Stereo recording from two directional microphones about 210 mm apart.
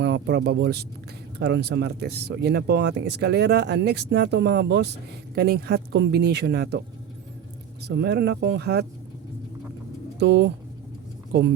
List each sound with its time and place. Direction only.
0.0 s speech: 55° right (ahead or behind)
7.9 s speech: 55° right (ahead or behind)
10.2 s speech: 55° right (ahead or behind)